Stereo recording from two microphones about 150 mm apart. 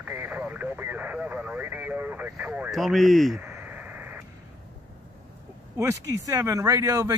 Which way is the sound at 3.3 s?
15° right (ahead or behind).